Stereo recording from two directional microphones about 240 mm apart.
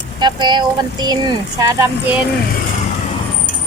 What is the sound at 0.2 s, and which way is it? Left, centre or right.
Speech, centre.